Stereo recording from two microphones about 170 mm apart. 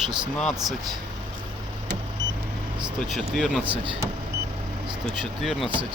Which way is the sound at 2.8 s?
Centre (ahead or behind).